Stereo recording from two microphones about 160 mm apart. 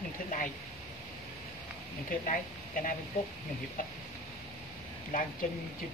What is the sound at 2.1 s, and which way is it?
Speech, 55° left (ahead or behind).